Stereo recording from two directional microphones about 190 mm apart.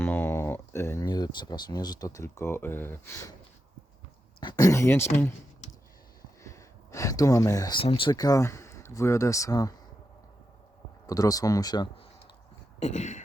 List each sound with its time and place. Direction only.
0.0 s speech: 10° left (ahead or behind)
4.4 s speech: 20° left (ahead or behind)
6.4 s speech: 15° left (ahead or behind)
11.0 s speech: 20° left (ahead or behind)
12.8 s a sound: 40° left (ahead or behind)